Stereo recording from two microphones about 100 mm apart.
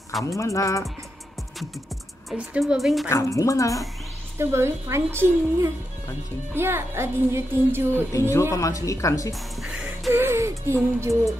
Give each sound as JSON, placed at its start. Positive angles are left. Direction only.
{"t": 0.2, "sound": "speech", "side_deg": 35}
{"t": 2.6, "sound": "speech", "side_deg": 0}
{"t": 3.1, "sound": "speech", "side_deg": 30}
{"t": 4.4, "sound": "speech", "side_deg": -25}
{"t": 8.1, "sound": "speech", "side_deg": 30}
{"t": 9.3, "sound": "speech", "side_deg": 0}
{"t": 10.1, "sound": "speech", "side_deg": -25}
{"t": 11.0, "sound": "music", "side_deg": -30}